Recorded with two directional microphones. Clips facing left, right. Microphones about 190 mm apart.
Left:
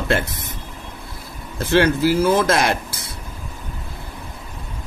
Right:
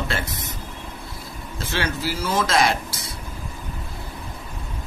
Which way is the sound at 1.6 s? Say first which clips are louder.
Left 11 dB; 55° left (ahead or behind).